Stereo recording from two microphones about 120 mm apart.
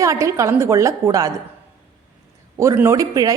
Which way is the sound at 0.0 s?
25° right (ahead or behind).